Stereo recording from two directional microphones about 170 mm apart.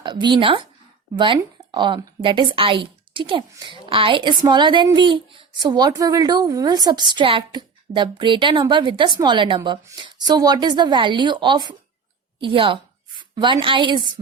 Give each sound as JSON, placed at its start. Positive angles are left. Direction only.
{"t": 0.0, "sound": "a woman's voice", "side_deg": -25}